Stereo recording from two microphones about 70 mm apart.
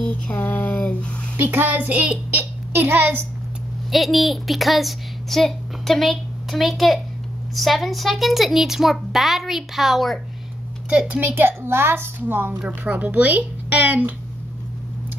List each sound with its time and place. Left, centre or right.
0.0 s a sound: centre
1.3 s a child's voice: right
3.9 s a woman's voice: centre
10.9 s speech: centre
11.3 s a woman's voice: right